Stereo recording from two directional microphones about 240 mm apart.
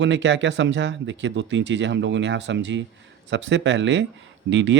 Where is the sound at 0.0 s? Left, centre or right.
Right.